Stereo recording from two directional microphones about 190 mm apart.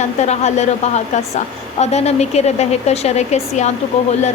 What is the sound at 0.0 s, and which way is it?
A woman's voice, 35° left (ahead or behind).